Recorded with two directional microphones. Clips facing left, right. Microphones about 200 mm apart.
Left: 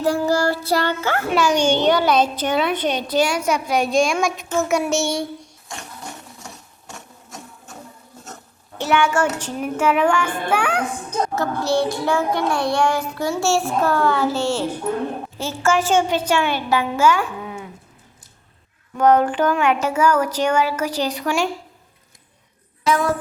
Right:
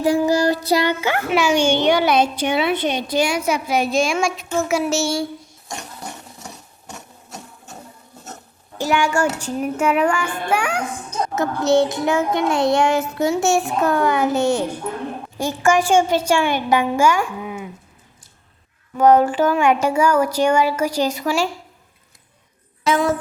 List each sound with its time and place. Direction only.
0.0 s a child's voice: 15° right (ahead or behind)
9.4 s a child's voice: 10° right (ahead or behind)
11.3 s a child's voice: 20° right (ahead or behind)
18.9 s a child's voice: 10° right (ahead or behind)
22.9 s a child's voice: 20° right (ahead or behind)